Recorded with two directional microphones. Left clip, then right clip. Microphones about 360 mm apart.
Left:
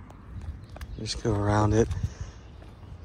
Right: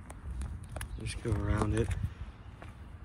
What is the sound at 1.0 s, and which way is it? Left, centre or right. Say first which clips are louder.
Speech: left 11 dB; centre.